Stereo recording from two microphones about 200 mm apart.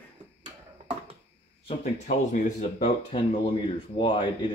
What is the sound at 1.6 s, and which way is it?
Speech, 40° left (ahead or behind).